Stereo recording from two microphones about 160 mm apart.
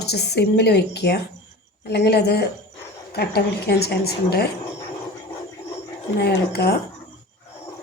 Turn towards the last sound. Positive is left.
turn(degrees=90)